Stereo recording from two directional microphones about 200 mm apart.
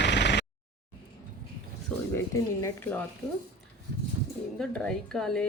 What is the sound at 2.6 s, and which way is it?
Speech, 10° left (ahead or behind).